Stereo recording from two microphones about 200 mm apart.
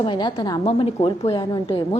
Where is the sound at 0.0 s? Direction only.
20° left (ahead or behind).